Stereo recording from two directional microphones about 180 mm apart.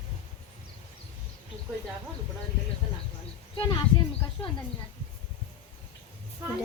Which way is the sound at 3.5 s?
25° left (ahead or behind).